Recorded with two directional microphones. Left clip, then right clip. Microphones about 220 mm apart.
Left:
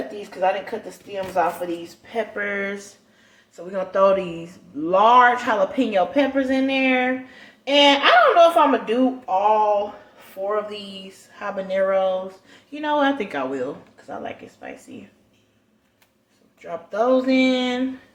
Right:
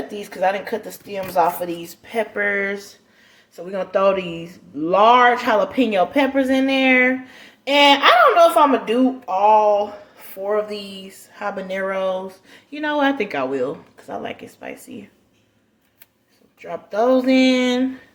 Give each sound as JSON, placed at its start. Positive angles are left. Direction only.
{"t": 0.3, "sound": "speech", "side_deg": -45}
{"t": 14.1, "sound": "speech", "side_deg": -35}
{"t": 16.6, "sound": "speech", "side_deg": -20}